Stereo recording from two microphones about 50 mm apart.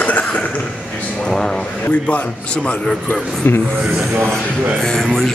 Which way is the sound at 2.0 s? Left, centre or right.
Left.